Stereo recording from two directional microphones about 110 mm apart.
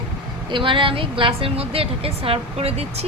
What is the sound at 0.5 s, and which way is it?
A woman's voice, 50° right (ahead or behind).